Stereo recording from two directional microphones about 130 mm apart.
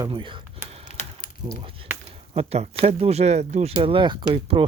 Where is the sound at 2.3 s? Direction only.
50° right (ahead or behind).